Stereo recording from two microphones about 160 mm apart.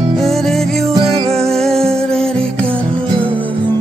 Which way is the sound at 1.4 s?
Centre (ahead or behind).